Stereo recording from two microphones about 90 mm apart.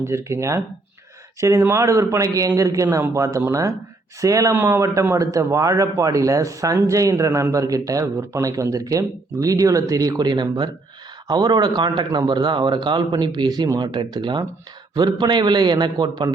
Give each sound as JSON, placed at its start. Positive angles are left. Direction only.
{"t": 0.0, "sound": "speech", "side_deg": -30}